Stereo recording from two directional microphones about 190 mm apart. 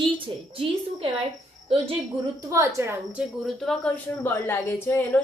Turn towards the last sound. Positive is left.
turn(degrees=10)  # may be behind; listen again after turning